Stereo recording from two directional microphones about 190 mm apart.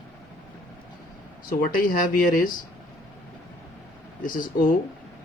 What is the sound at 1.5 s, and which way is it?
Speech, 50° left (ahead or behind).